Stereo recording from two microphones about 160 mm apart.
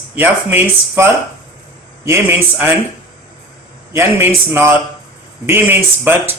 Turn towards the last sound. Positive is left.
turn(degrees=-15)  # may be behind; listen again after turning